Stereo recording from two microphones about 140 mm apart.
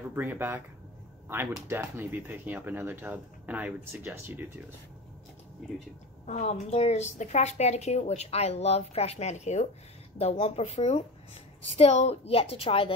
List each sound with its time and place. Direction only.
0.1 s speech: 15° right (ahead or behind)
1.7 s speech: 15° right (ahead or behind)
6.2 s a woman's voice: 55° left (ahead or behind)
10.3 s a woman's voice: 45° left (ahead or behind)